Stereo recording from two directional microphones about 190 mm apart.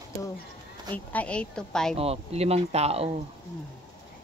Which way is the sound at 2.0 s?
30° right (ahead or behind).